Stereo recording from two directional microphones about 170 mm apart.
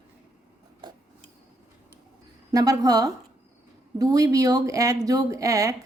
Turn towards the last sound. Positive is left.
turn(degrees=-20)  # may be behind; listen again after turning